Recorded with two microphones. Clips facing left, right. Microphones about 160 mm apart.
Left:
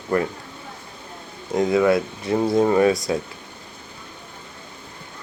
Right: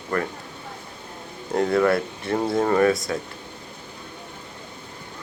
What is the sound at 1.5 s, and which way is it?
Speech, 15° left (ahead or behind).